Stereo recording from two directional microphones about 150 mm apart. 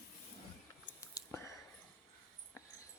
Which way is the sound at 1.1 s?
20° left (ahead or behind).